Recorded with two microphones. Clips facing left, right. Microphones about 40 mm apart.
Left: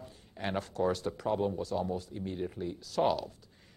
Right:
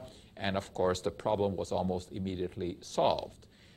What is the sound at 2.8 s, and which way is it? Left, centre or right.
Speech, right.